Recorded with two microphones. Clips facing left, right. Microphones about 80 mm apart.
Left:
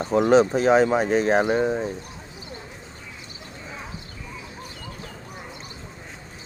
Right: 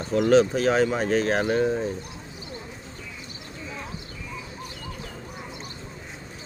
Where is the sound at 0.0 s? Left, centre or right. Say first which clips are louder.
Left 2 dB; left.